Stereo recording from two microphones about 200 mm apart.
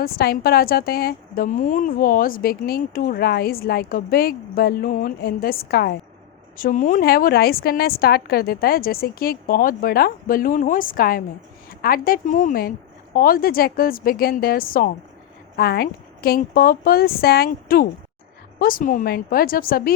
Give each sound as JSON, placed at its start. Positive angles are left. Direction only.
{"t": 0.0, "sound": "a woman's voice", "side_deg": 50}